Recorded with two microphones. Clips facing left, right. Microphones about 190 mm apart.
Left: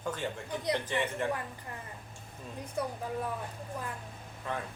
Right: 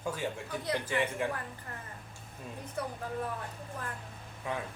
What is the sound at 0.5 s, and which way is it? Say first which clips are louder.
Speech: left 3 dB; 20° left (ahead or behind).